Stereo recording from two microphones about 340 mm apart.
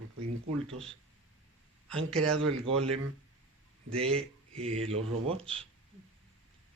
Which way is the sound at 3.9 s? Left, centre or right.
Centre.